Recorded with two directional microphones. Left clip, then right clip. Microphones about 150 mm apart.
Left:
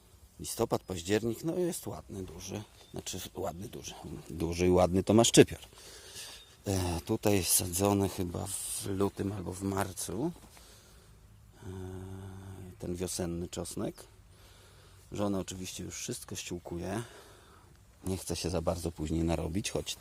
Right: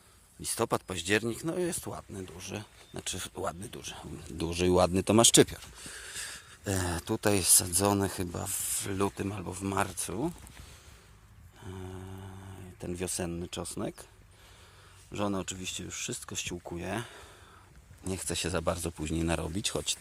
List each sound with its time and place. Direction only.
0.4 s speech: 15° left (ahead or behind)
5.2 s speech: 30° left (ahead or behind)
5.5 s speech: 40° left (ahead or behind)
5.9 s speech: 20° left (ahead or behind); by 10.3 s centre (ahead or behind)
11.6 s a sound: centre (ahead or behind)
15.1 s speech: 10° left (ahead or behind)
18.0 s speech: 15° left (ahead or behind)
19.5 s speech: 25° left (ahead or behind)